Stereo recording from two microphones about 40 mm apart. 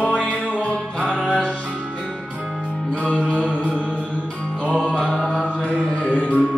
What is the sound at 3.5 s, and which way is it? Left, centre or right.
Mantra, left.